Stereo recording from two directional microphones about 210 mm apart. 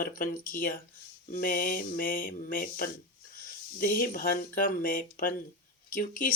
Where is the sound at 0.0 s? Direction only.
40° left (ahead or behind).